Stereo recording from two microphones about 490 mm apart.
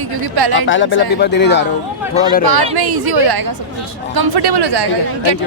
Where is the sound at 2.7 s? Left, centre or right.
Right.